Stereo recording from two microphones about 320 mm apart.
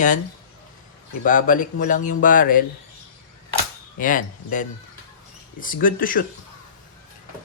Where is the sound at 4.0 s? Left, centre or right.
Left.